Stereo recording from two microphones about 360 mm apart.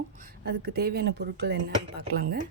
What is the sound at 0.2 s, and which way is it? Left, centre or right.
Speech, right.